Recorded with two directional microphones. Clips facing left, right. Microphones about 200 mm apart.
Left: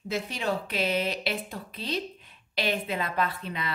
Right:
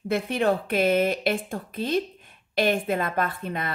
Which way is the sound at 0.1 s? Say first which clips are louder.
Right 7 dB; 55° right (ahead or behind).